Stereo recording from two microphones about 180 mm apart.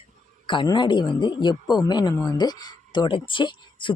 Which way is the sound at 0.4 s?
25° left (ahead or behind).